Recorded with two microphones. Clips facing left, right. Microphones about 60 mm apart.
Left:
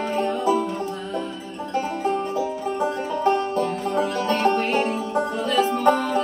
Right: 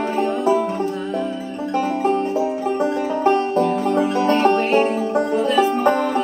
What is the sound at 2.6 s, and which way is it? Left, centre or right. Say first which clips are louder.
Music: right 4 dB; right.